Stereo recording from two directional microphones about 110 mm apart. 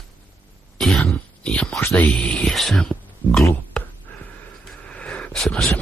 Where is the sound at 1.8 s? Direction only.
15° left (ahead or behind).